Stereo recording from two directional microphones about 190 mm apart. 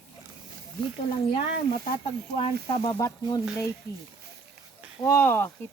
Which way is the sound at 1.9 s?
25° left (ahead or behind).